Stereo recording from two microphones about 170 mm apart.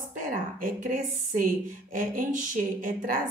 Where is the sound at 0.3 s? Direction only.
50° right (ahead or behind).